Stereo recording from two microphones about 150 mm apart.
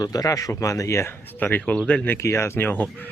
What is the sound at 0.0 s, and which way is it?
Speech, 25° left (ahead or behind).